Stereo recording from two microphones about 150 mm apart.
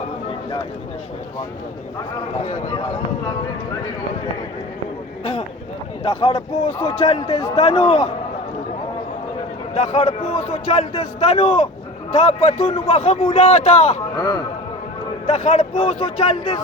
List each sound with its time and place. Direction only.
6.0 s a man's voice: 40° left (ahead or behind)
9.7 s a man's voice: 45° left (ahead or behind)
14.2 s a man's voice: 25° left (ahead or behind)
15.3 s a man's voice: 50° left (ahead or behind)